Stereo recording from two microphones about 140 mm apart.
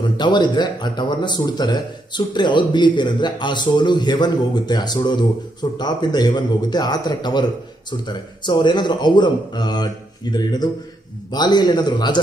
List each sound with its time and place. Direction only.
0.0 s a man's voice: 30° left (ahead or behind)